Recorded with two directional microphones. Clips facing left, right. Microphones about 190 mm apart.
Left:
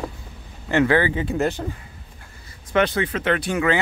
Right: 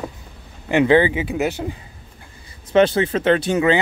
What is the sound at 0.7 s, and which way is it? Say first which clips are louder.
Speech: right 4 dB; 20° right (ahead or behind).